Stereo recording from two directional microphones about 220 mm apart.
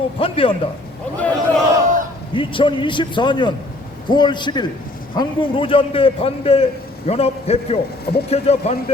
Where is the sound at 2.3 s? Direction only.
20° left (ahead or behind).